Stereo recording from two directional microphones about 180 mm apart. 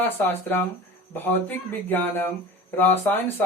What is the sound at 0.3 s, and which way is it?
Speech, 10° left (ahead or behind).